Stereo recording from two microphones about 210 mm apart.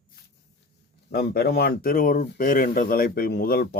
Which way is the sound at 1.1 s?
50° left (ahead or behind).